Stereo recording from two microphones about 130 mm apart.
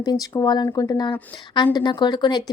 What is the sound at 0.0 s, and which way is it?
A woman's voice, 30° left (ahead or behind).